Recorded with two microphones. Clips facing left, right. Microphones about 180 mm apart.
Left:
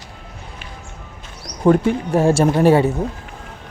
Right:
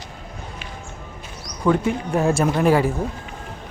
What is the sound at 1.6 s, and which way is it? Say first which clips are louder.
Speech: left 5 dB; 30° left (ahead or behind).